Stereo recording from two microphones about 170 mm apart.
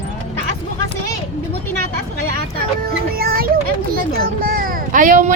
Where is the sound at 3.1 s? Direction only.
60° right (ahead or behind).